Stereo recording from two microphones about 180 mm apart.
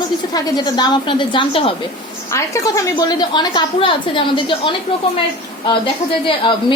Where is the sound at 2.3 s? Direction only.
20° left (ahead or behind).